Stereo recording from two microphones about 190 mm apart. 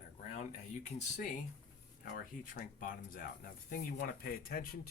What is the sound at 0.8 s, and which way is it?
Speech, 40° left (ahead or behind).